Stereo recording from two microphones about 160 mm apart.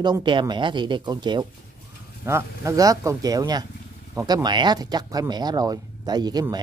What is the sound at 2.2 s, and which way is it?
Speech, 20° right (ahead or behind).